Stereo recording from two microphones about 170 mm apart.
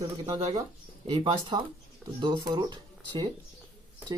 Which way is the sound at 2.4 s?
25° right (ahead or behind).